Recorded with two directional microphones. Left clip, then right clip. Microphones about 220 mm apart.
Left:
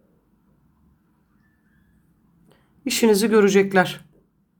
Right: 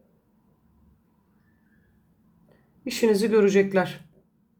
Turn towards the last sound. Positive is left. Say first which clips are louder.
# left 4 dB
turn(degrees=20)  # may be behind; listen again after turning